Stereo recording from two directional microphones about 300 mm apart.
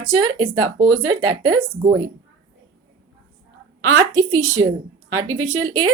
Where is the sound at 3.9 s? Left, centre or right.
Right.